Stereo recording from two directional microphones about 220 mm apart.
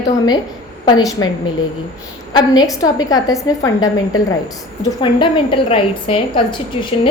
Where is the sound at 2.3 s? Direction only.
15° left (ahead or behind).